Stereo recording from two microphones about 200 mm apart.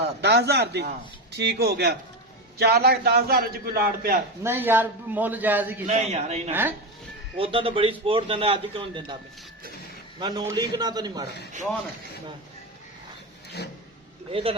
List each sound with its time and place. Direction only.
0.0 s a man's voice: 55° right (ahead or behind)
4.4 s a man's voice: 10° right (ahead or behind)
5.8 s a man's voice: 35° right (ahead or behind)
6.5 s a man's voice: 10° right (ahead or behind)
7.3 s a man's voice: 25° right (ahead or behind)
10.2 s a man's voice: 20° right (ahead or behind)
14.3 s a man's voice: 25° right (ahead or behind)